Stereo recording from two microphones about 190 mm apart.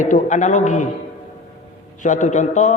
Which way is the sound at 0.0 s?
40° left (ahead or behind).